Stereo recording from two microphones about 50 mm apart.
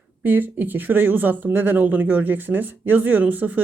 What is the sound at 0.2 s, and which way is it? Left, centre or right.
Speech, right.